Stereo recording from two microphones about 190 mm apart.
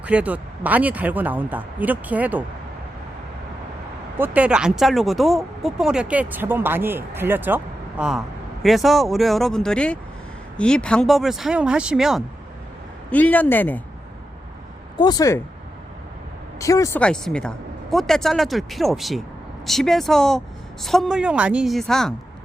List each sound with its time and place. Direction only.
0.0 s speech: 5° right (ahead or behind)
4.2 s speech: 5° right (ahead or behind)
13.1 s speech: 10° left (ahead or behind)
14.9 s speech: 20° left (ahead or behind)
16.6 s speech: 15° left (ahead or behind)
17.0 s speech: 5° left (ahead or behind)